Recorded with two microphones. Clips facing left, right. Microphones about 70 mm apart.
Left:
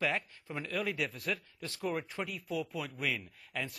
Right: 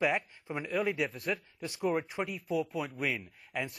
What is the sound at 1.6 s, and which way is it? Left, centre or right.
Speech, centre.